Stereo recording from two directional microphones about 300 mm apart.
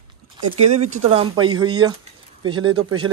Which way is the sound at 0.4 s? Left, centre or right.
Right.